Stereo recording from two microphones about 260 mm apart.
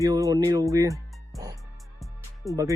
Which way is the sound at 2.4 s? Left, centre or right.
Centre.